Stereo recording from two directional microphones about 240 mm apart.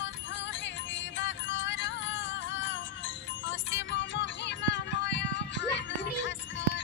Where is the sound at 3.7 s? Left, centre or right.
Left.